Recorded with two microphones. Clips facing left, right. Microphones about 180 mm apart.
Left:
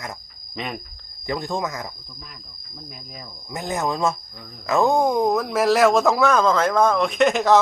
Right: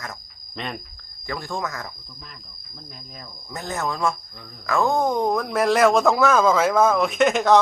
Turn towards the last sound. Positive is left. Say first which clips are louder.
# even
turn(degrees=0)  # may be behind; listen again after turning